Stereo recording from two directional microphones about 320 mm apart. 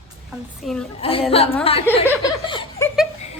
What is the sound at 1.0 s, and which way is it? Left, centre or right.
Speech, centre.